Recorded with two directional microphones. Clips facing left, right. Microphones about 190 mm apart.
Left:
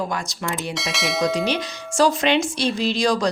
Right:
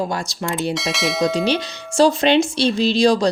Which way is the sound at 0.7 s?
Centre (ahead or behind).